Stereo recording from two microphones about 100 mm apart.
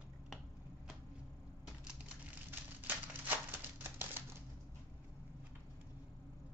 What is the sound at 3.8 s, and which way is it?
Typewriter, 20° right (ahead or behind).